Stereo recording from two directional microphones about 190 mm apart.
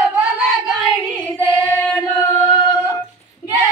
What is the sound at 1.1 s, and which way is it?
Singing, 10° left (ahead or behind).